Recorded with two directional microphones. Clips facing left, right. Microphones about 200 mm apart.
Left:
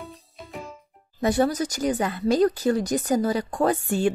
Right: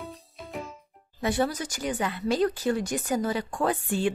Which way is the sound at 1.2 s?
40° left (ahead or behind).